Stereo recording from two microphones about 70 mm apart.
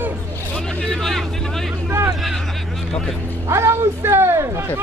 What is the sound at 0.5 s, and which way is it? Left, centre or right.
Speech, centre.